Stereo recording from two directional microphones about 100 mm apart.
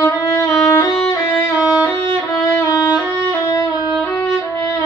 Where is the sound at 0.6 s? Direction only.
35° left (ahead or behind).